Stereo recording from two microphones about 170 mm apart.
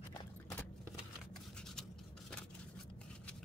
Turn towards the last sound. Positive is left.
turn(degrees=5)  # may be behind; listen again after turning